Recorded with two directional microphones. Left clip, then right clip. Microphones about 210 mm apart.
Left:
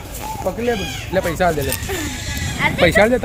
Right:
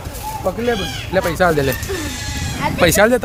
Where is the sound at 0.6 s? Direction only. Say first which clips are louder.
Right 1 dB; centre (ahead or behind).